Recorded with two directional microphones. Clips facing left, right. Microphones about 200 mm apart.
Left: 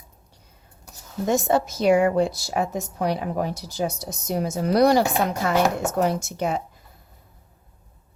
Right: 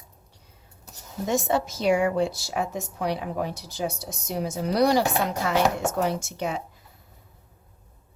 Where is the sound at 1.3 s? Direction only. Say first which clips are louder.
Left 3 dB; 45° left (ahead or behind).